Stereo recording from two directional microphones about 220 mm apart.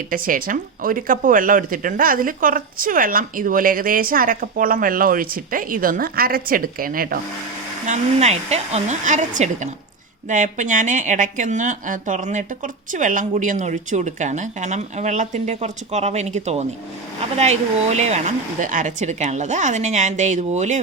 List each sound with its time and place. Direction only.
0.1 s speech: 40° right (ahead or behind)
7.9 s speech: 30° right (ahead or behind)